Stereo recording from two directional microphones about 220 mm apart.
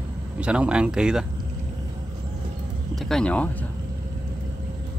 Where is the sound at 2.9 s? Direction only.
Centre (ahead or behind).